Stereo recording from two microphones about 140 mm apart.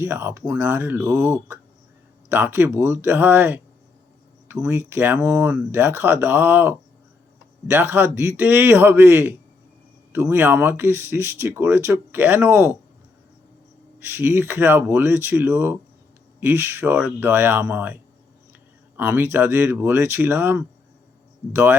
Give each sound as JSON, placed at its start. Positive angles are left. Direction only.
{"t": 0.0, "sound": "speech", "side_deg": -20}
{"t": 4.6, "sound": "speech", "side_deg": -15}
{"t": 14.0, "sound": "speech", "side_deg": -15}